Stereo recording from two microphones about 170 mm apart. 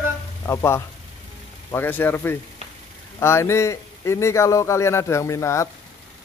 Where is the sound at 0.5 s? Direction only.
15° left (ahead or behind).